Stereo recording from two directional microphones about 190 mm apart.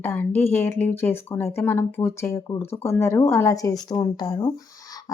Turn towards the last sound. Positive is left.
turn(degrees=20)  # may be behind; listen again after turning